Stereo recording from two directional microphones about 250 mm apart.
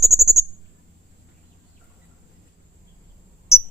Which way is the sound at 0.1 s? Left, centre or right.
Centre.